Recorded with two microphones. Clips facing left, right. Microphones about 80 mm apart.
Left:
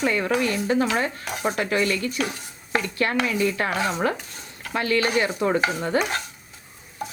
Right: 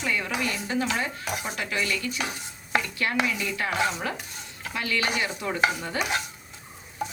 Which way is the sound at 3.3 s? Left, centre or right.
Left.